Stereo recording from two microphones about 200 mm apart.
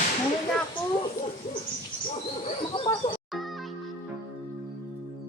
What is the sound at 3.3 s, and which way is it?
Music, centre (ahead or behind).